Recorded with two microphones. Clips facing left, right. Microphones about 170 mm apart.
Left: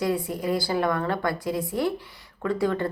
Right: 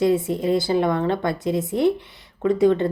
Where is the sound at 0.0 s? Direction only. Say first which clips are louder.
Right 6 dB; 25° right (ahead or behind).